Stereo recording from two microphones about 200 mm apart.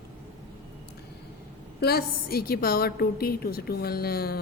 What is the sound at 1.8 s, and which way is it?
A woman's voice, 50° left (ahead or behind).